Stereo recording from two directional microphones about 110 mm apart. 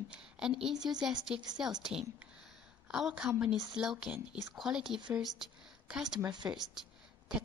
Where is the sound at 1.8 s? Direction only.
5° right (ahead or behind).